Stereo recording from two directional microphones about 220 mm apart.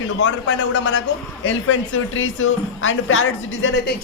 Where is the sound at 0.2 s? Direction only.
55° left (ahead or behind).